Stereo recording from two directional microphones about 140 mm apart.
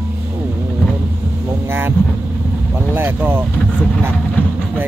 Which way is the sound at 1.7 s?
15° right (ahead or behind).